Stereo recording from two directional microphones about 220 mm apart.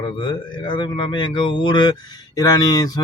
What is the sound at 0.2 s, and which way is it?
Speech, 20° left (ahead or behind).